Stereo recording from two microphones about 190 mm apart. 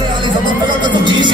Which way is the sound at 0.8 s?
25° right (ahead or behind).